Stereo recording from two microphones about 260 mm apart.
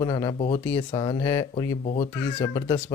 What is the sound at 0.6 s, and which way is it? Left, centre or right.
Speech, centre.